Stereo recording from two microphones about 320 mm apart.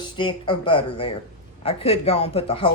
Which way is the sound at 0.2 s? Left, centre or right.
Centre.